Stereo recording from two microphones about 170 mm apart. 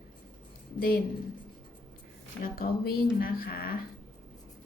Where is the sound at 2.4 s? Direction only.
55° left (ahead or behind).